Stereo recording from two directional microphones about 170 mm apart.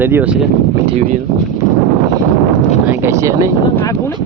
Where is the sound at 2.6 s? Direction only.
40° left (ahead or behind).